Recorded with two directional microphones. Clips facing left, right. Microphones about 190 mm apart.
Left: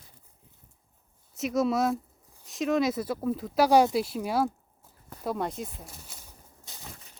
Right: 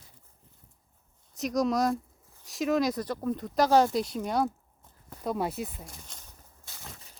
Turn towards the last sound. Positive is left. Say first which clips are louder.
# even
turn(degrees=5)  # may be behind; listen again after turning